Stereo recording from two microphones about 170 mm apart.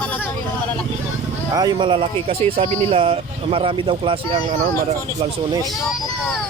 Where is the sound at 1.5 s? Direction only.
25° right (ahead or behind).